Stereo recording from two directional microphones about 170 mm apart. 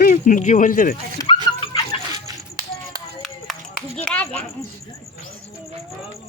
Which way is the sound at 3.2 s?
Centre (ahead or behind).